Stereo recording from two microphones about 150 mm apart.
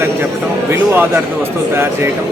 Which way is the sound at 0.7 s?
15° right (ahead or behind).